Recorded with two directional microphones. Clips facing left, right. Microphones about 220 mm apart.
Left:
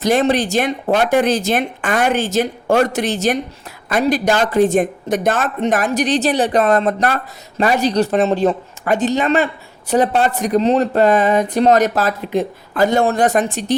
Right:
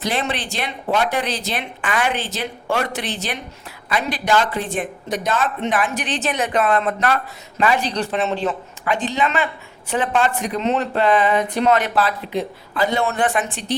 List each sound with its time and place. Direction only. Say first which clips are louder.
0.0 s speech: left 9 dB; 45° left (ahead or behind)